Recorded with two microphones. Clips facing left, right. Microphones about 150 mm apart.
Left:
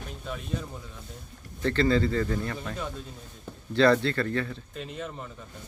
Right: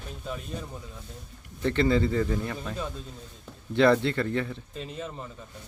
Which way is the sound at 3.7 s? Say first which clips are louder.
Even; 20° right (ahead or behind).